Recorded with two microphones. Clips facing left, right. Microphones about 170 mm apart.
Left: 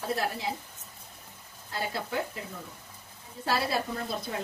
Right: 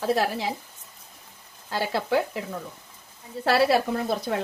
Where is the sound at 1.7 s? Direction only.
75° right (ahead or behind).